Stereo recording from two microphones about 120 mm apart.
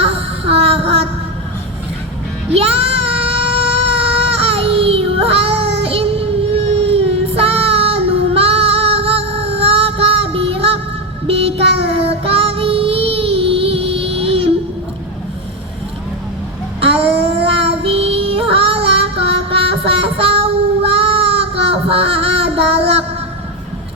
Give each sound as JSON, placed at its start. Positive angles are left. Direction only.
{"t": 0.0, "sound": "music", "side_deg": -55}
{"t": 2.5, "sound": "child singing", "side_deg": -55}
{"t": 3.8, "sound": "baby cry", "side_deg": -50}
{"t": 11.3, "sound": "child singing", "side_deg": -55}
{"t": 16.8, "sound": "child singing", "side_deg": -50}